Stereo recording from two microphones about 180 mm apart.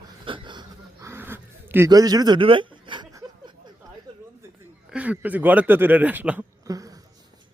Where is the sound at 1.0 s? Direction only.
15° right (ahead or behind).